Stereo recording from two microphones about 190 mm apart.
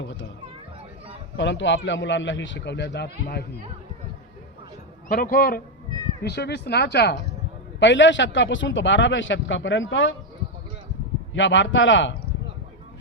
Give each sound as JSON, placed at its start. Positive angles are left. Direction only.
{"t": 1.4, "sound": "a man's voice", "side_deg": 75}
{"t": 5.0, "sound": "speech", "side_deg": 50}
{"t": 7.8, "sound": "a man's voice", "side_deg": 75}
{"t": 11.3, "sound": "a man's voice", "side_deg": 75}